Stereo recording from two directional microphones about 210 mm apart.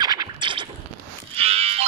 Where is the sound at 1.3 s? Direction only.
30° right (ahead or behind).